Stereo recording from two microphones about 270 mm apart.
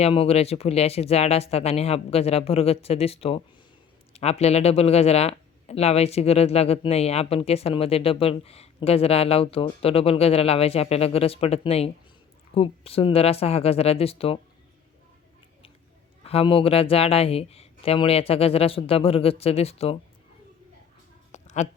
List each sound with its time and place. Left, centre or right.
0.0 s speech: left
16.2 s speech: left
21.3 s a sound: left